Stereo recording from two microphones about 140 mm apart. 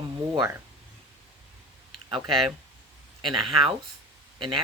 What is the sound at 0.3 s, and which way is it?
Speech, 20° right (ahead or behind).